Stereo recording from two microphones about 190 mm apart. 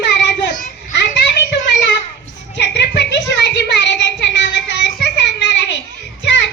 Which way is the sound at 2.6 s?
65° left (ahead or behind).